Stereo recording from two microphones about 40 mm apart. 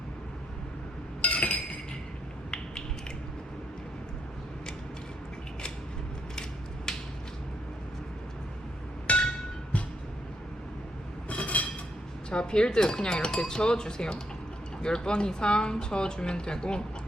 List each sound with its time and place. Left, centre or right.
1.2 s chink: left
6.9 s finger snapping: centre
9.1 s chink: left
11.3 s a sound: left
12.3 s speech: left